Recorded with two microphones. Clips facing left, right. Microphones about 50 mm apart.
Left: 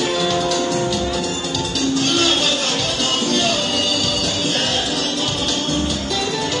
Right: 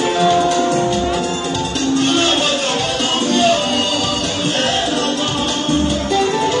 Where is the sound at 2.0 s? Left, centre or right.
Right.